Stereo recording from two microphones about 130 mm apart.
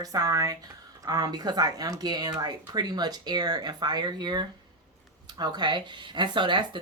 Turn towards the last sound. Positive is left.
turn(degrees=-35)  # may be behind; listen again after turning